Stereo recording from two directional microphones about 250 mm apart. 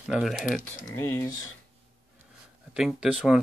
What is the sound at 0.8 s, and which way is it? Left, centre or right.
Speech, centre.